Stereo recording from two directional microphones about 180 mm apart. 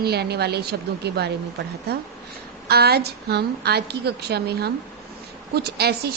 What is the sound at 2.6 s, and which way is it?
A woman's voice, 60° right (ahead or behind).